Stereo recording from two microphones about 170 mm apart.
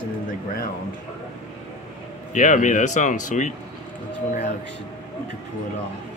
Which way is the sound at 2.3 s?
50° left (ahead or behind).